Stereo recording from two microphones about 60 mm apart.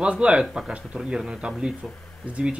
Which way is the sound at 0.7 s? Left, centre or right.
Right.